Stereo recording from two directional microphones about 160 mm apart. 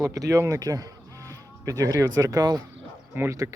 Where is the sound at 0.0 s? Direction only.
20° right (ahead or behind).